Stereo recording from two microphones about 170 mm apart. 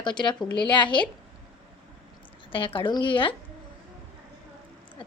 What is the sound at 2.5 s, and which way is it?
Speech, 30° left (ahead or behind).